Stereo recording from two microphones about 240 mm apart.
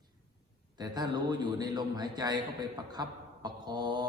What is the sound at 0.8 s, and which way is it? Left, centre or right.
A man's voice, centre.